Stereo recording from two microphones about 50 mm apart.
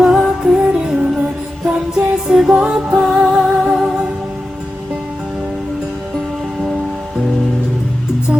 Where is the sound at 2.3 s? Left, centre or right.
Centre.